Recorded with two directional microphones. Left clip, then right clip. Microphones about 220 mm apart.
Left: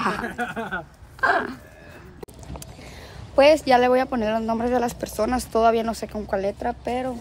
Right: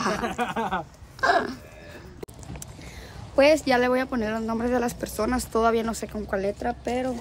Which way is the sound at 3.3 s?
5° left (ahead or behind).